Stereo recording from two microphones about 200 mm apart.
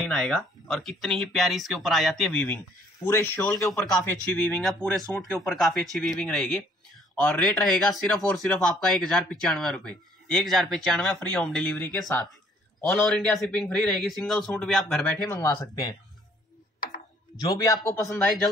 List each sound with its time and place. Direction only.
0.0 s a man's voice: centre (ahead or behind)
15.2 s speech: 15° left (ahead or behind)
17.4 s speech: 20° left (ahead or behind)